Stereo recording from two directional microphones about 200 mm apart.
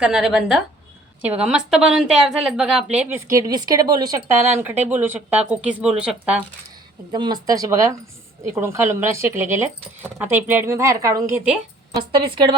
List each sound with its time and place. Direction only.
0.0 s a woman's voice: centre (ahead or behind)
7.1 s a woman's voice: 20° right (ahead or behind)